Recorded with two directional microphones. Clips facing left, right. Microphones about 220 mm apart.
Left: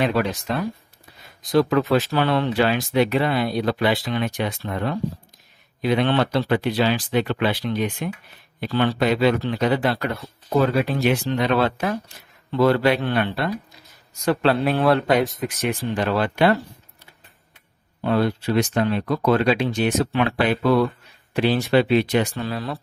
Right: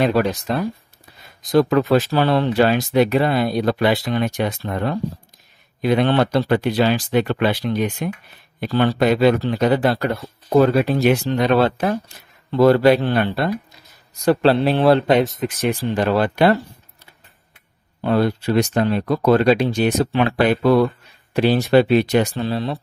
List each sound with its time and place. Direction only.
0.0 s speech: 40° right (ahead or behind)
1.8 s speech: 30° right (ahead or behind)
15.9 s speech: 40° right (ahead or behind)
18.0 s speech: 40° right (ahead or behind)
22.3 s speech: 30° right (ahead or behind)